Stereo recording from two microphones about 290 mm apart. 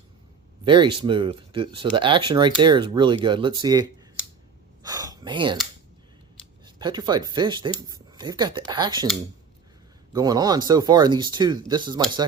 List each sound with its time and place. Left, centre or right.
0.6 s speech: centre
4.8 s a sound: centre
6.7 s speech: centre
10.1 s speech: centre